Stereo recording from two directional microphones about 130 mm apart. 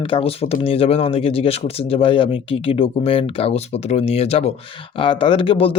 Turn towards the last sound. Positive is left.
turn(degrees=45)  # may be behind; listen again after turning